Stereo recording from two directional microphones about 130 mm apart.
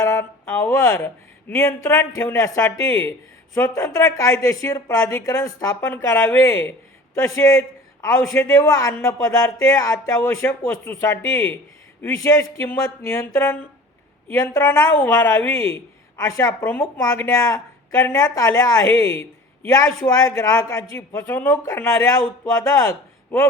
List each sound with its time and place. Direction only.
0.0 s speech: 20° left (ahead or behind)
16.6 s speech: 10° left (ahead or behind)